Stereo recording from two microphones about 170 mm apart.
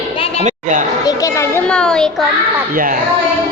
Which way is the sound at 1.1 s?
20° left (ahead or behind).